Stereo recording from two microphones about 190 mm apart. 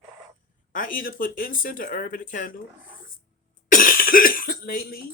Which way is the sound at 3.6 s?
45° left (ahead or behind).